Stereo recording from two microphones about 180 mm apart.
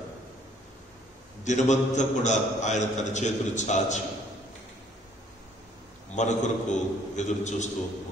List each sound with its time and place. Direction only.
1.4 s a man's voice: 40° left (ahead or behind)
6.1 s a man's voice: 40° left (ahead or behind)